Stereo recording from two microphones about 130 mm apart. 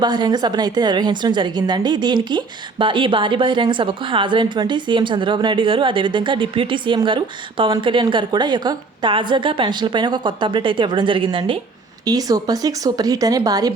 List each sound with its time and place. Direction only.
0.0 s a woman's voice: 35° right (ahead or behind)
12.0 s speech: 30° right (ahead or behind)